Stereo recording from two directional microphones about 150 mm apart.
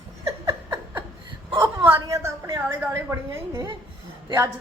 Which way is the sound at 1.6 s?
35° right (ahead or behind).